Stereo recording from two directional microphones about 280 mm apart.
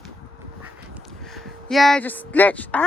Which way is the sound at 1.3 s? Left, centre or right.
Centre.